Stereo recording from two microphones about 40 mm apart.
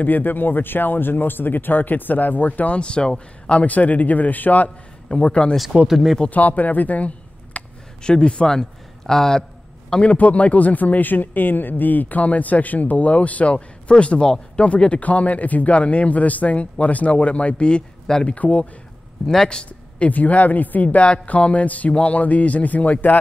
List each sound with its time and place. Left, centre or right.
0.0 s speech: left
2.7 s speech: left
3.5 s speech: left
5.1 s speech: left
5.9 s speech: centre
6.3 s speech: left
7.5 s a sound: left
8.0 s speech: left
10.0 s speech: left; by 18.2 s centre
18.2 s speech: left
19.2 s a man's voice: centre
20.1 s speech: left